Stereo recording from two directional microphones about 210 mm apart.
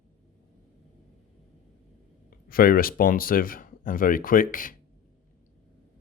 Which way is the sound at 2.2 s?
45° left (ahead or behind).